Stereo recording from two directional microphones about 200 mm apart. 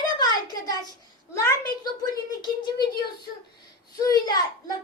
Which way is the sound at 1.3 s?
15° left (ahead or behind).